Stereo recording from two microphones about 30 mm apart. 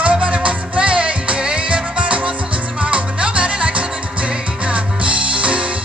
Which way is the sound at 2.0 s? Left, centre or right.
Right.